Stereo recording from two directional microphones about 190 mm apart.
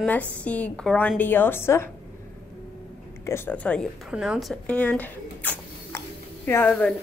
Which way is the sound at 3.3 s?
10° left (ahead or behind).